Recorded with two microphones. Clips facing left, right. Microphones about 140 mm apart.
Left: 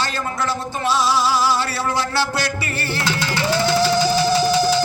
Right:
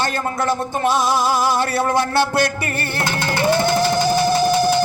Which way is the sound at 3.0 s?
55° right (ahead or behind).